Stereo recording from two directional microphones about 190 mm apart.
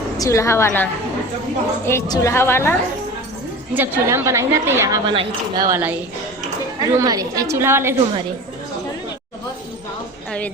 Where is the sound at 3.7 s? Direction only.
10° right (ahead or behind).